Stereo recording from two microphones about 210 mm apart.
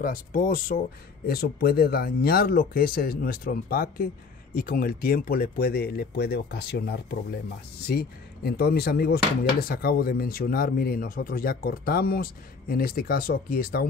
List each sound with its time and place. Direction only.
0.0 s speech: 40° left (ahead or behind)